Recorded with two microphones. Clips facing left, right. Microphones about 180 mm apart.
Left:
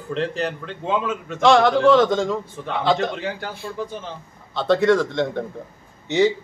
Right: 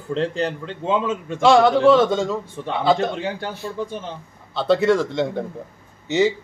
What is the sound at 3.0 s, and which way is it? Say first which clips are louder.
Speech: right 1 dB; 25° right (ahead or behind).